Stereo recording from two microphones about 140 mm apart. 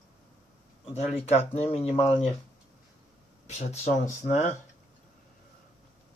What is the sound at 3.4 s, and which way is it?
Speech, 50° left (ahead or behind).